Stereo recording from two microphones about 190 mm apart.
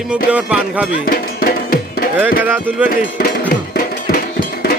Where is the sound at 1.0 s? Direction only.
50° left (ahead or behind).